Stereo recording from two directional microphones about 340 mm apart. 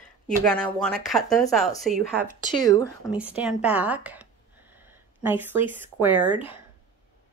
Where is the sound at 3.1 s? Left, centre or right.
Centre.